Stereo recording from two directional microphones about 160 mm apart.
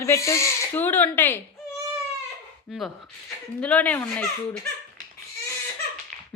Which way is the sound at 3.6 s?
10° left (ahead or behind).